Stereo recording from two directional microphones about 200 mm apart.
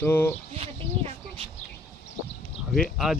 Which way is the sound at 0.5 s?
30° right (ahead or behind).